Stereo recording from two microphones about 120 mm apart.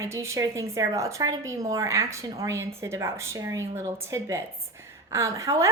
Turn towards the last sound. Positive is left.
turn(degrees=-30)  # may be behind; listen again after turning